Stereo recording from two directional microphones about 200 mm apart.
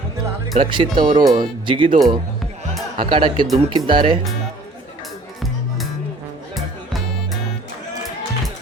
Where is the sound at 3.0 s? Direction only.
25° right (ahead or behind).